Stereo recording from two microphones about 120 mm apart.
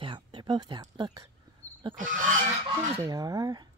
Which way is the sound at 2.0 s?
90° right.